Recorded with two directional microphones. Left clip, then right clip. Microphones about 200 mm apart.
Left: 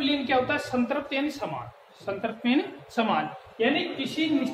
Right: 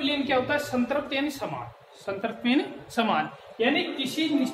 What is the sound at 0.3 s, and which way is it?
Speech, 15° left (ahead or behind).